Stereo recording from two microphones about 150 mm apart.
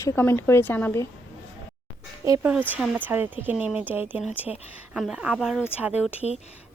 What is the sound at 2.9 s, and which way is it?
Speech, 15° right (ahead or behind).